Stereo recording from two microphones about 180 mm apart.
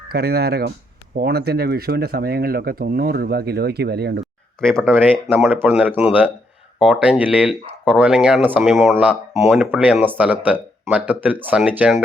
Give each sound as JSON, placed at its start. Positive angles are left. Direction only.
{"t": 0.1, "sound": "speech", "side_deg": -60}
{"t": 4.6, "sound": "speech", "side_deg": 5}
{"t": 4.9, "sound": "speech", "side_deg": -10}